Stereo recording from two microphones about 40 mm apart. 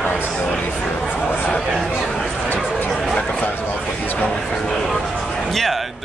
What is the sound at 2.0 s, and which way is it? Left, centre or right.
Chatter, centre.